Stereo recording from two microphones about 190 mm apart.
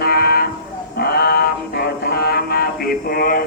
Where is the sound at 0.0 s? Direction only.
50° left (ahead or behind).